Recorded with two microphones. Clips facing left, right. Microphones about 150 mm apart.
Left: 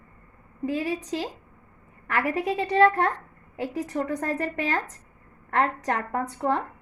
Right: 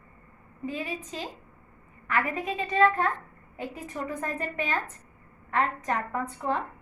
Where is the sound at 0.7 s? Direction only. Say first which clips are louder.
Left 7 dB; 75° left (ahead or behind).